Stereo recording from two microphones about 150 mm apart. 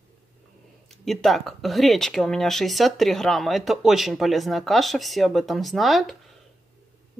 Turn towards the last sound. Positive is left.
turn(degrees=0)  # may be behind; listen again after turning